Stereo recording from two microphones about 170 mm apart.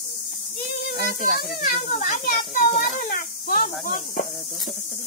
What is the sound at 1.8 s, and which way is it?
Speech, 45° left (ahead or behind).